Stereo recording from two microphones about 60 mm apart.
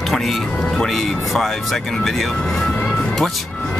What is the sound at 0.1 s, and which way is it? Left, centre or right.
Speech, centre.